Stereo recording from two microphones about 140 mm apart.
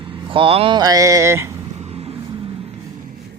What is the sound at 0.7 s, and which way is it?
Speech, 25° right (ahead or behind).